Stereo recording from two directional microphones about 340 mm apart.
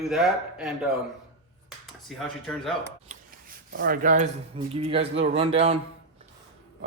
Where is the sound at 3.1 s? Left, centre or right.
Right.